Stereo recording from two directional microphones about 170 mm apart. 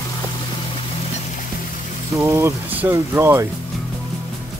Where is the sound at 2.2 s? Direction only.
15° right (ahead or behind).